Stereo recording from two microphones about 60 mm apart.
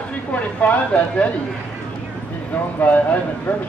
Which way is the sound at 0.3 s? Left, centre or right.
Left.